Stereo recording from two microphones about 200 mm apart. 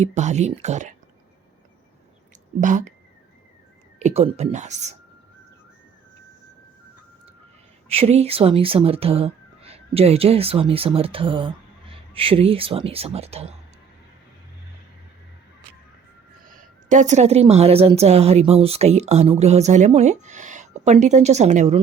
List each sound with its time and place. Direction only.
0.0 s a woman's voice: 35° right (ahead or behind)
2.6 s a woman's voice: 35° right (ahead or behind)
4.0 s a woman's voice: 30° right (ahead or behind)
7.9 s speech: 30° right (ahead or behind)
16.5 s a woman's voice: 40° right (ahead or behind)